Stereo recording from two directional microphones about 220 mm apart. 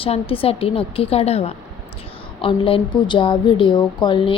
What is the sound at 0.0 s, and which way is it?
A woman's voice, 25° left (ahead or behind).